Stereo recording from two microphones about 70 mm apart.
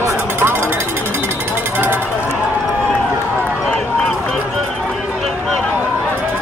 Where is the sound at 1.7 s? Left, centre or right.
Right.